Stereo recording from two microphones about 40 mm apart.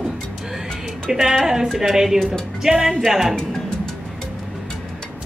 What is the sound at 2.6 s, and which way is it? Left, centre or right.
Music, centre.